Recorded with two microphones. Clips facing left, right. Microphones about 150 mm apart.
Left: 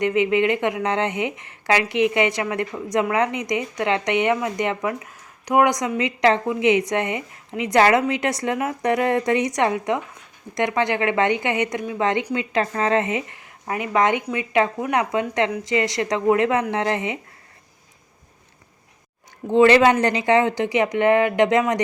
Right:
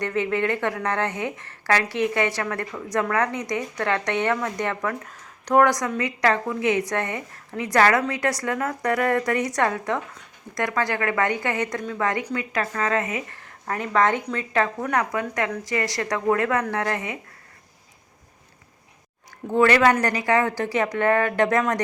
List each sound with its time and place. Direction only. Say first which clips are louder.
0.0 s a woman's voice: left 5 dB; 15° left (ahead or behind)
19.5 s a woman's voice: left 4 dB; 20° left (ahead or behind)